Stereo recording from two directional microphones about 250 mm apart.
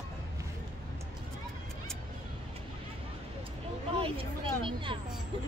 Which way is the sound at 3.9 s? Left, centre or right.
Right.